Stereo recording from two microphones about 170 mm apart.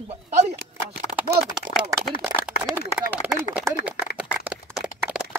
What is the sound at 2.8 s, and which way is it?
Speech, 5° right (ahead or behind).